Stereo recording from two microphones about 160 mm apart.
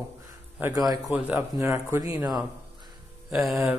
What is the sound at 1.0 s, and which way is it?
Speech, 5° right (ahead or behind).